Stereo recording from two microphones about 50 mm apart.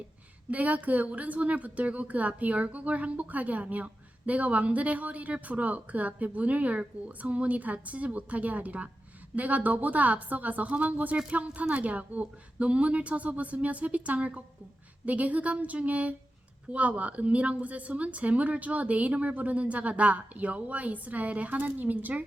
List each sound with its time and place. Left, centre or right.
0.5 s a woman's voice: right